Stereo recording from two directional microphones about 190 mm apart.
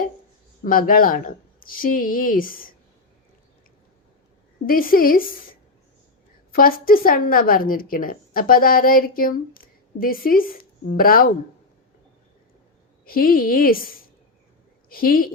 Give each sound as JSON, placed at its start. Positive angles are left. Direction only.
{"t": 0.6, "sound": "a woman's voice", "side_deg": 45}
{"t": 4.6, "sound": "a woman's voice", "side_deg": 50}
{"t": 13.1, "sound": "a woman's voice", "side_deg": 50}